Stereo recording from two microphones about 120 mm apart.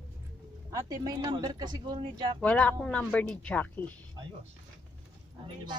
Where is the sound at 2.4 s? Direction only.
10° left (ahead or behind).